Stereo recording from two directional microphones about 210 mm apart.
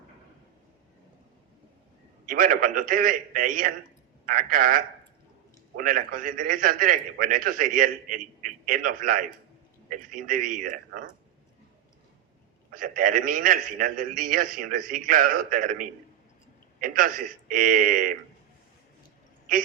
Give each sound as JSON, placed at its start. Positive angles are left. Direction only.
{"t": 2.2, "sound": "a man's voice", "side_deg": -40}
{"t": 12.7, "sound": "a man's voice", "side_deg": -40}